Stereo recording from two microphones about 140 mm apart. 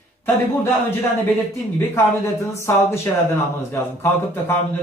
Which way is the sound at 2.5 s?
20° left (ahead or behind).